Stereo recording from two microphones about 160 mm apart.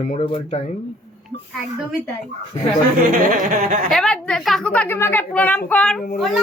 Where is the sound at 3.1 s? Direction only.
55° right (ahead or behind).